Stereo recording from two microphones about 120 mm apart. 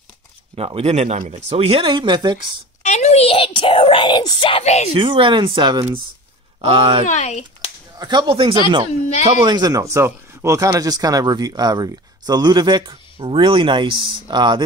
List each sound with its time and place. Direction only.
0.6 s speech: 55° right (ahead or behind)
2.8 s whispering: 65° left (ahead or behind)
4.9 s speech: 45° right (ahead or behind)
6.6 s speech: 50° right (ahead or behind)
7.1 s speech: 75° left (ahead or behind)
8.0 s speech: 35° right (ahead or behind)